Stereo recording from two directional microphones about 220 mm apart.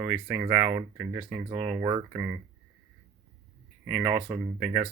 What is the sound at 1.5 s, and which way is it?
Speech, 25° right (ahead or behind).